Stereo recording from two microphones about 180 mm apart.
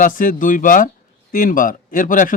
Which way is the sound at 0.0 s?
45° left (ahead or behind).